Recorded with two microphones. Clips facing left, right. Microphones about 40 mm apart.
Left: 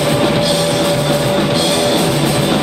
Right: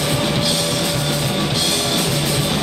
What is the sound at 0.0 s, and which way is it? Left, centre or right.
Music, centre.